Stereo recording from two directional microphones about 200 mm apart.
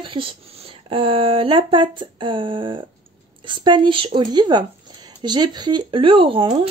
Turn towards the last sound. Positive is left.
turn(degrees=-25)  # may be behind; listen again after turning